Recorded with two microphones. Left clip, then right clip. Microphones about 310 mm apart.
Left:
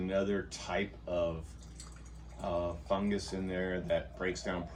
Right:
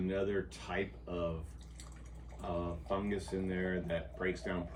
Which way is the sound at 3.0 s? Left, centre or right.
Left.